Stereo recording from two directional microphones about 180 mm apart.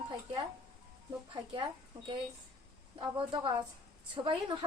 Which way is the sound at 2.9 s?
25° right (ahead or behind).